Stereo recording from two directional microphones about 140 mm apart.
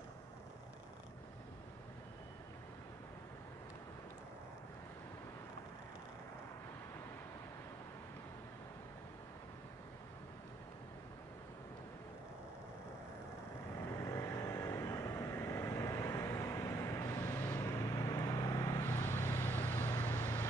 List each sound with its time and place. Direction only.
13.9 s vehicle: 20° left (ahead or behind)